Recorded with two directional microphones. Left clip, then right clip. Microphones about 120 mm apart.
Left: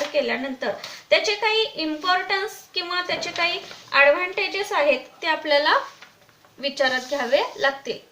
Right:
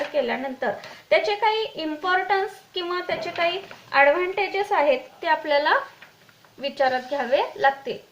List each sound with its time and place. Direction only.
0.1 s a woman's voice: 25° right (ahead or behind)